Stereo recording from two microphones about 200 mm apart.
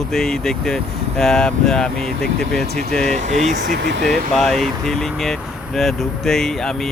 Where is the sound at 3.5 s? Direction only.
60° right (ahead or behind).